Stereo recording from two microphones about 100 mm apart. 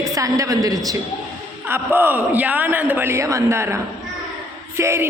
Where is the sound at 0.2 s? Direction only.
35° right (ahead or behind).